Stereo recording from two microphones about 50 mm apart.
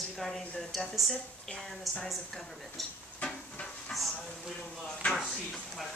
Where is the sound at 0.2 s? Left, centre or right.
Centre.